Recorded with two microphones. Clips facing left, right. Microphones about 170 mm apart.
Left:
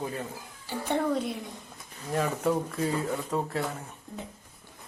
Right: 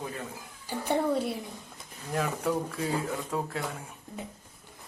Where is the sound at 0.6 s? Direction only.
10° right (ahead or behind).